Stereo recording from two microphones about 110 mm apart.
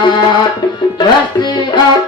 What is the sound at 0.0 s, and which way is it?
Music, 40° left (ahead or behind).